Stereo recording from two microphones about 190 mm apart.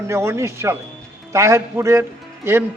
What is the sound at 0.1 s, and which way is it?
A man's voice, 15° right (ahead or behind).